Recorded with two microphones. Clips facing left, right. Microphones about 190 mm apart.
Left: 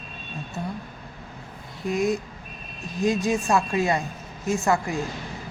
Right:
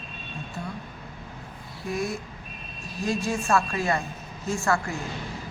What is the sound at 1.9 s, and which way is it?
A woman's voice, 20° left (ahead or behind).